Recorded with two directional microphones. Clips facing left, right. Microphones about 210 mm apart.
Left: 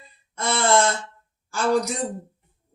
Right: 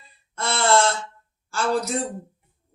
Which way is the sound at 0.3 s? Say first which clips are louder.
Even; 15° left (ahead or behind).